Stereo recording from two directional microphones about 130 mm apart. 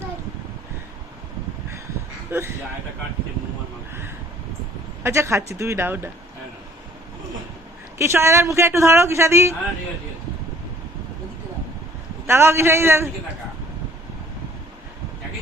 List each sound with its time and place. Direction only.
2.3 s speech: 15° right (ahead or behind)
5.0 s speech: 20° right (ahead or behind)
7.9 s speech: 20° right (ahead or behind)
12.2 s speech: 20° right (ahead or behind)